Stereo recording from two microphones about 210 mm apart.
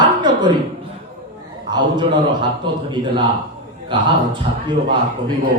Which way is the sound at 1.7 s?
20° right (ahead or behind).